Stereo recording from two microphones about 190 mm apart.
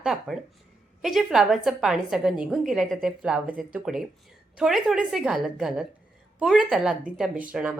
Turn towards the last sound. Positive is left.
turn(degrees=-5)  # may be behind; listen again after turning